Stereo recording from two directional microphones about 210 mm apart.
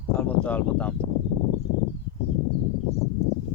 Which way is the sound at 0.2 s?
5° left (ahead or behind).